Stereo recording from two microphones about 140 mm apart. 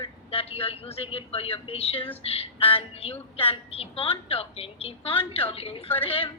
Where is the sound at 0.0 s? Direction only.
45° left (ahead or behind).